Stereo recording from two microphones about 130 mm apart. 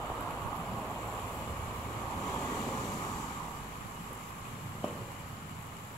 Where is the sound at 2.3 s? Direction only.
20° left (ahead or behind).